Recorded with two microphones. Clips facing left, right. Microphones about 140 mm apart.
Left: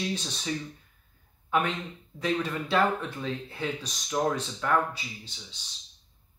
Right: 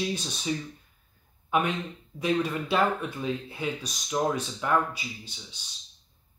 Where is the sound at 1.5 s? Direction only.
15° right (ahead or behind).